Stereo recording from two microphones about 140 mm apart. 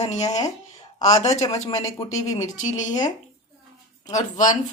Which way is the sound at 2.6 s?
60° left (ahead or behind).